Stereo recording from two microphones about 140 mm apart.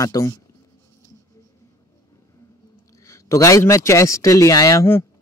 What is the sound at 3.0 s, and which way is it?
A man's voice, 20° left (ahead or behind).